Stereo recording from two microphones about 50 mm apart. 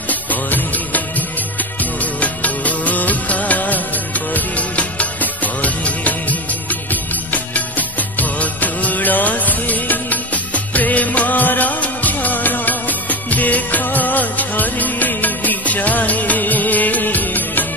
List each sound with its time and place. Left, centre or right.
0.1 s music of bollywood: left
2.1 s music of bollywood: left
4.3 s music: left